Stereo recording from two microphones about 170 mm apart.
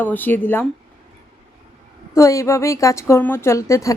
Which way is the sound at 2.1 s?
20° left (ahead or behind).